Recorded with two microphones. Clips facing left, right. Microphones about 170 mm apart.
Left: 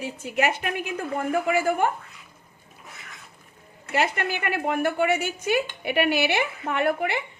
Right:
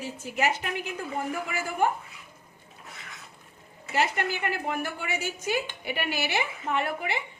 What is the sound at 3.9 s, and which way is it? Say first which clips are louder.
A woman's voice: left 2 dB; 60° left (ahead or behind).